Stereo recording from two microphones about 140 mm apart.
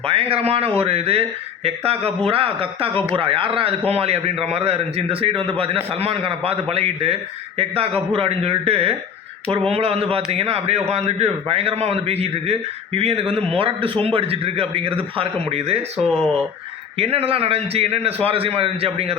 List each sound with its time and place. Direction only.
0.0 s a man's voice: 45° right (ahead or behind)
16.0 s speech: 5° left (ahead or behind)
17.0 s a man's voice: 45° right (ahead or behind)